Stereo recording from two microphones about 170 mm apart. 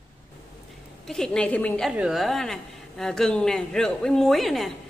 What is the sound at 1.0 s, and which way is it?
Speech, 5° left (ahead or behind).